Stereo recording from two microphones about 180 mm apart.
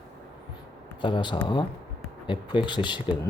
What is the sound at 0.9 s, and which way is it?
Speech, 25° left (ahead or behind).